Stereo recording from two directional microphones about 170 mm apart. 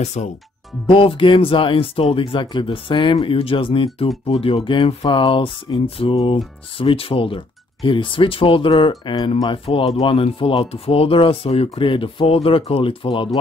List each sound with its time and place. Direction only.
0.0 s speech: 40° left (ahead or behind)
0.8 s speech: 30° left (ahead or behind)